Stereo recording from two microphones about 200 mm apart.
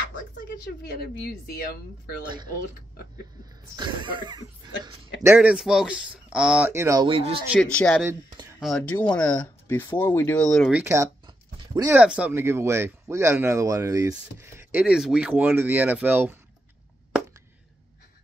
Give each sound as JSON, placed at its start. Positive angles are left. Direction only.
{"t": 1.0, "sound": "speech", "side_deg": 50}
{"t": 2.2, "sound": "speech", "side_deg": -20}
{"t": 3.7, "sound": "speech", "side_deg": -25}
{"t": 7.1, "sound": "speech", "side_deg": -25}
{"t": 7.5, "sound": "speech", "side_deg": 5}
{"t": 12.0, "sound": "speech", "side_deg": -5}